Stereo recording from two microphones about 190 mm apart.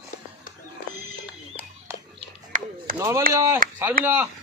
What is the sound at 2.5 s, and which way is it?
Chop, 40° right (ahead or behind).